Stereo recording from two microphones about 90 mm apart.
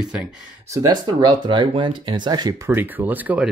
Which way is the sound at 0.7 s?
45° right (ahead or behind).